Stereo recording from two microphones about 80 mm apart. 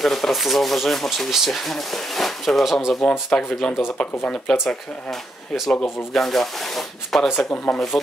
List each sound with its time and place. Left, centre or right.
0.0 s speech: centre
7.3 s speech: left
7.7 s speech: centre